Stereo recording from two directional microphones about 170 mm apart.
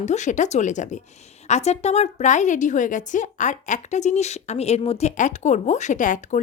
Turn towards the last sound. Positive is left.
turn(degrees=50)  # may be behind; listen again after turning